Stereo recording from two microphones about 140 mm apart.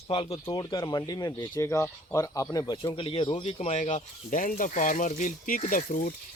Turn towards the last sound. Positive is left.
turn(degrees=75)  # may be behind; listen again after turning